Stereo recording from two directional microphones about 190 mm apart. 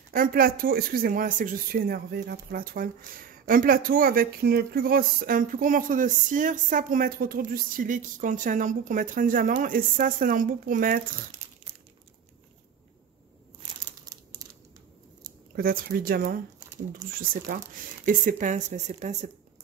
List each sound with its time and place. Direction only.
0.1 s speech: 50° right (ahead or behind)
13.6 s crumpling: 25° right (ahead or behind)
15.5 s speech: 50° right (ahead or behind)
17.5 s speech: 45° right (ahead or behind)